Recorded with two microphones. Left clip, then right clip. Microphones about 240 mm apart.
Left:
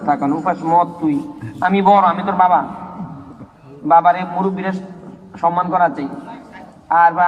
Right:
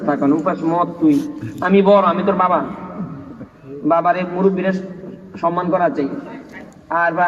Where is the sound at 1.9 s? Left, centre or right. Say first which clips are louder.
Left 1 dB; left.